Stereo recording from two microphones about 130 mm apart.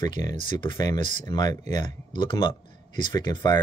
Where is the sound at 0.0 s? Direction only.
30° left (ahead or behind).